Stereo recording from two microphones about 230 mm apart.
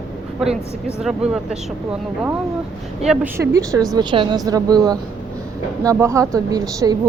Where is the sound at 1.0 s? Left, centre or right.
Centre.